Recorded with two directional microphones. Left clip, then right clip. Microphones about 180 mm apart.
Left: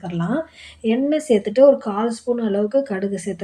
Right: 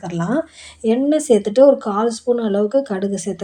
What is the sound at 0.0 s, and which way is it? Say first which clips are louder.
Speech: right 3 dB; 30° right (ahead or behind).